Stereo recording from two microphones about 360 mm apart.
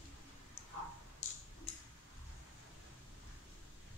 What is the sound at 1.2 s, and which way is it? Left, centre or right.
Tick-tock, centre.